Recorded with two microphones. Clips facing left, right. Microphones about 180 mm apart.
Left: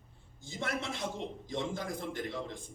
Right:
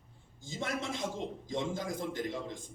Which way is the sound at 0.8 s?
15° right (ahead or behind).